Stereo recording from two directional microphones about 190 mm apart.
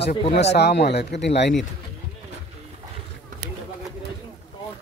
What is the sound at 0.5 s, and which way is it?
Speech, 60° left (ahead or behind).